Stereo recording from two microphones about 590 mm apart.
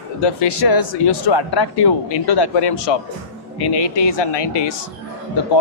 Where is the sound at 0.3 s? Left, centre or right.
Left.